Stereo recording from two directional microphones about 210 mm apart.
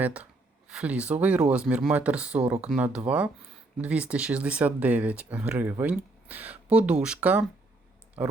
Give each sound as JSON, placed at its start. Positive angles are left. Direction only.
{"t": 0.0, "sound": "speech", "side_deg": -5}